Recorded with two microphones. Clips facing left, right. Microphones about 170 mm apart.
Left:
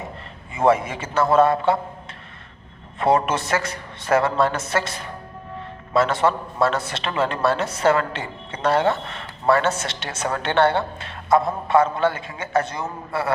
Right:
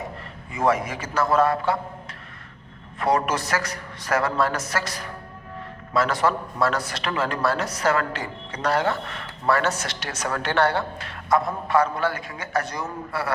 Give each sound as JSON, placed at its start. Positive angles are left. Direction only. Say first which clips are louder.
{"t": 0.5, "sound": "a man's voice", "louder": "left 4 dB", "side_deg": 25}
{"t": 3.0, "sound": "a man's voice", "louder": "left 3 dB", "side_deg": 25}